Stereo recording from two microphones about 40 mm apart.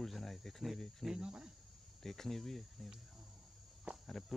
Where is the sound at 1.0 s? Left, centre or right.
Centre.